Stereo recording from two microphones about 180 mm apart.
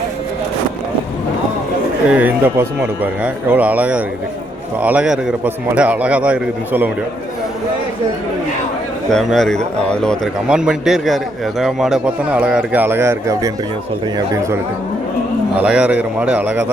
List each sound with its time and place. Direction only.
2.0 s a man's voice: 10° right (ahead or behind)
9.0 s a man's voice: centre (ahead or behind)